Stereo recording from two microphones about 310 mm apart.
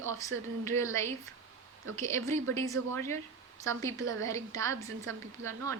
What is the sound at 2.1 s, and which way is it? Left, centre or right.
A woman's voice, centre.